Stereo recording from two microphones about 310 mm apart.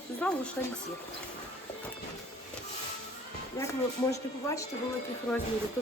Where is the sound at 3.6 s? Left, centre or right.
Centre.